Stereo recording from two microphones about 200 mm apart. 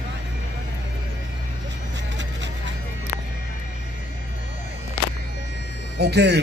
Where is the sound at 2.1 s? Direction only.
65° right (ahead or behind).